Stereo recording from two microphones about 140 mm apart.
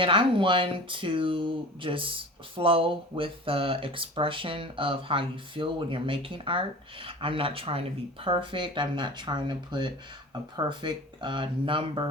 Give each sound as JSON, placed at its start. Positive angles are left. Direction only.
{"t": 0.0, "sound": "speech", "side_deg": -40}